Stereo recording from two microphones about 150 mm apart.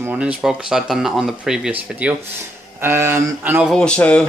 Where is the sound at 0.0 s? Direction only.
10° right (ahead or behind).